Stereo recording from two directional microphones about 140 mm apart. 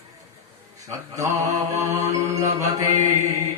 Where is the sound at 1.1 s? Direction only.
25° right (ahead or behind).